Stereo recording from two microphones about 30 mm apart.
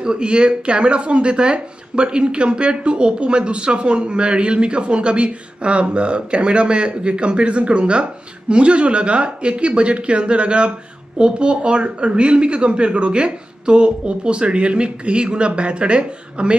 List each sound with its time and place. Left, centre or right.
0.0 s speech: right